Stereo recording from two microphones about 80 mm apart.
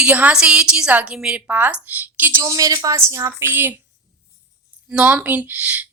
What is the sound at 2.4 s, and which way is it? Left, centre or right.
A woman's voice, right.